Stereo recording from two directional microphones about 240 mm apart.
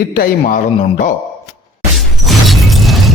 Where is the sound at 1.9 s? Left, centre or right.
Centre.